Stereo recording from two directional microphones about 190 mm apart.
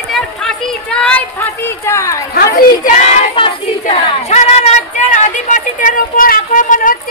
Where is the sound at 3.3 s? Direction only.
30° left (ahead or behind).